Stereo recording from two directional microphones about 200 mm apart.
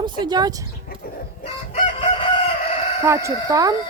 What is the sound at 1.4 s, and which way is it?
Chicken, 30° left (ahead or behind).